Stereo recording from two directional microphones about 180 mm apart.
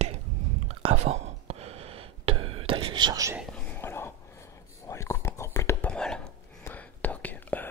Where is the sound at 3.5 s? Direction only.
10° left (ahead or behind).